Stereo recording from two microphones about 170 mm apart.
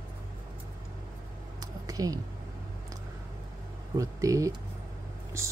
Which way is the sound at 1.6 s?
20° right (ahead or behind).